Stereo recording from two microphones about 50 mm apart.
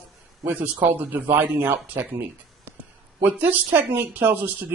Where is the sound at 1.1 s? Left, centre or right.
Right.